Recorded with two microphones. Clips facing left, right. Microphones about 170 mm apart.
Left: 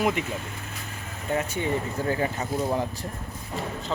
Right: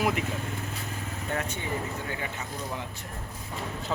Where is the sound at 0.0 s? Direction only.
Centre (ahead or behind).